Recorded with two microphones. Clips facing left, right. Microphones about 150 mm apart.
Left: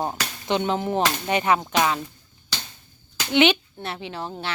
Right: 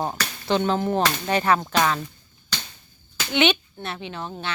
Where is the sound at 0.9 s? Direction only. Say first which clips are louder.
Even; 15° left (ahead or behind).